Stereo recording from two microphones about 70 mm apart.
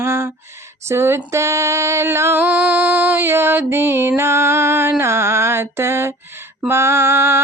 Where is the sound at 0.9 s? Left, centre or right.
Right.